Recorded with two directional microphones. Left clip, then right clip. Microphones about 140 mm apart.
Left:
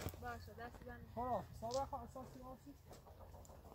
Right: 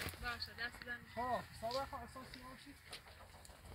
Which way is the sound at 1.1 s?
35° left (ahead or behind).